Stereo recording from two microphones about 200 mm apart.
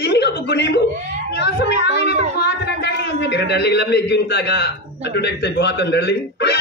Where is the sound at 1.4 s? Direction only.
60° left (ahead or behind).